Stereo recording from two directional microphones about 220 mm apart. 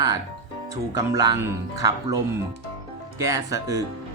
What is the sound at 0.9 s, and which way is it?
Speech, 15° right (ahead or behind).